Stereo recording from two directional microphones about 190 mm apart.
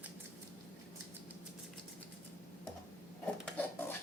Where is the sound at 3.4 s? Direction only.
10° left (ahead or behind).